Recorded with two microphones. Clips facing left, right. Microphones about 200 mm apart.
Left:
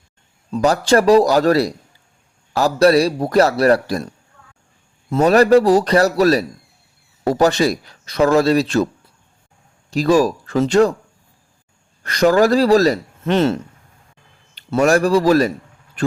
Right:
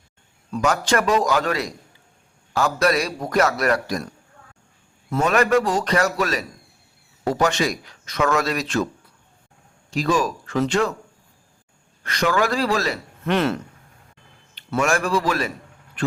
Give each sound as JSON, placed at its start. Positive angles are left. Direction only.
{"t": 0.5, "sound": "a man's voice", "side_deg": 35}
{"t": 5.1, "sound": "a man's voice", "side_deg": 35}
{"t": 9.9, "sound": "a man's voice", "side_deg": 35}
{"t": 12.0, "sound": "a man's voice", "side_deg": 40}
{"t": 14.8, "sound": "a man's voice", "side_deg": 40}
{"t": 16.0, "sound": "vehicle", "side_deg": 40}